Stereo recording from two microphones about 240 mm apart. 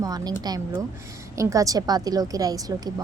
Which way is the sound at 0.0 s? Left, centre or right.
Centre.